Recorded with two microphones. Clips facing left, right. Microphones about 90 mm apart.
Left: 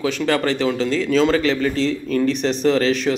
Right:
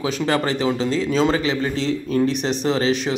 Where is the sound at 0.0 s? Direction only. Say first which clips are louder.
Left 1 dB; 25° right (ahead or behind).